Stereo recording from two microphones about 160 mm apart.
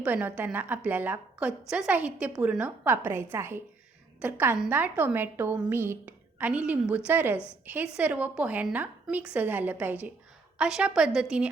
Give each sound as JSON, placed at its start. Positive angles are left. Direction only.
{"t": 0.0, "sound": "a woman's voice", "side_deg": -10}
{"t": 7.3, "sound": "a woman's voice", "side_deg": 15}
{"t": 7.6, "sound": "a woman's voice", "side_deg": -10}